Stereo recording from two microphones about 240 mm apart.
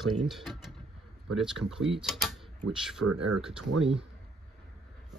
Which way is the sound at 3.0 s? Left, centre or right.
Right.